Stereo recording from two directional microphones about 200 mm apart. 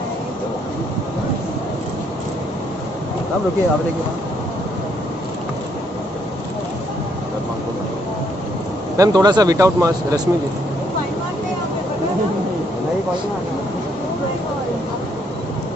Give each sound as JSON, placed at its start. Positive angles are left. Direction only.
{"t": 8.9, "sound": "speech", "side_deg": -20}